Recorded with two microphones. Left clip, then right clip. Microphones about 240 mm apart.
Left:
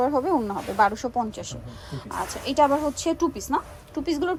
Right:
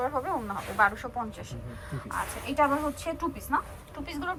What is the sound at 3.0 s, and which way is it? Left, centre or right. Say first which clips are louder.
Speech: left 8 dB; left.